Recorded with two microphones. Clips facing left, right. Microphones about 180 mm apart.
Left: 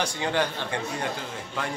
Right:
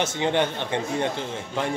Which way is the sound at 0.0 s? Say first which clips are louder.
Right 3 dB; 25° right (ahead or behind).